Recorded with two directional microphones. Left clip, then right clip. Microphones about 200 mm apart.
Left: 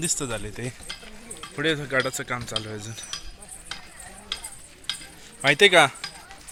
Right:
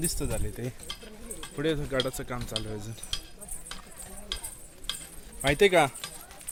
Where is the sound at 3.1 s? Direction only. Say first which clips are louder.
Right 1 dB; 45° right (ahead or behind).